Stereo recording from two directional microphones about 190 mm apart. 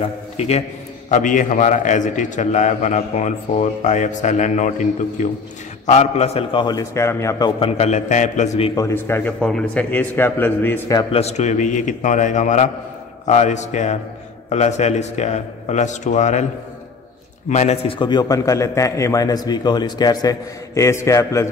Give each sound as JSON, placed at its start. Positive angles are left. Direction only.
{"t": 0.0, "sound": "a man's voice", "side_deg": 35}
{"t": 7.6, "sound": "a man's voice", "side_deg": 30}
{"t": 8.7, "sound": "a man's voice", "side_deg": 15}
{"t": 11.0, "sound": "a man's voice", "side_deg": 30}
{"t": 17.5, "sound": "a man's voice", "side_deg": 35}